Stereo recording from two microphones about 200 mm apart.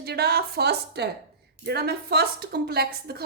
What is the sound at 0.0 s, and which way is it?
A woman's voice, 55° right (ahead or behind).